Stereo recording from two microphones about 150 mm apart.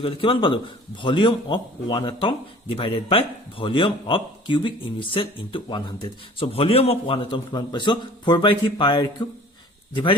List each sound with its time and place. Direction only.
0.0 s speech: 35° left (ahead or behind)